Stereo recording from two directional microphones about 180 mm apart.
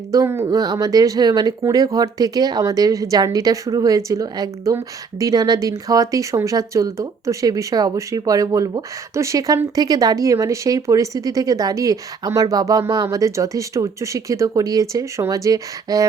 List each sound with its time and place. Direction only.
0.1 s speech: 15° right (ahead or behind)